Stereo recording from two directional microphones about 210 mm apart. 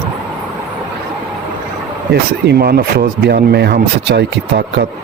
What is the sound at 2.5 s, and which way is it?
Speech, 50° right (ahead or behind).